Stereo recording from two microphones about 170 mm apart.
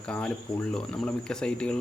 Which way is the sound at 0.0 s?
5° left (ahead or behind).